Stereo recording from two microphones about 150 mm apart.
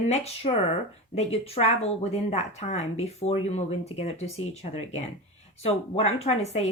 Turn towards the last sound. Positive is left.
turn(degrees=45)  # may be behind; listen again after turning